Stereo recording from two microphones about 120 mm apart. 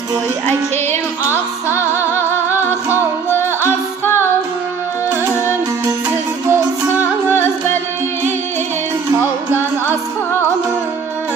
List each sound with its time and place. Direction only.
1.2 s music: 15° right (ahead or behind)
1.7 s music: 20° left (ahead or behind)
5.0 s music: 15° right (ahead or behind)
7.3 s music: 15° left (ahead or behind)